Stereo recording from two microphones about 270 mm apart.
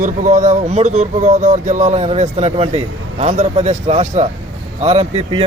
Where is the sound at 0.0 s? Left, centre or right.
Right.